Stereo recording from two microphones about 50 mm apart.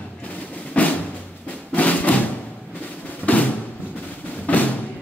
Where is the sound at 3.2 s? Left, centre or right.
Left.